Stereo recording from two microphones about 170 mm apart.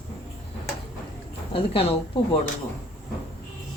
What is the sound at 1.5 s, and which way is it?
Speech, 35° left (ahead or behind).